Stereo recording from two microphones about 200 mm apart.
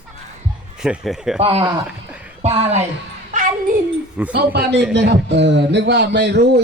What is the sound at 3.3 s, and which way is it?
Music, 40° right (ahead or behind).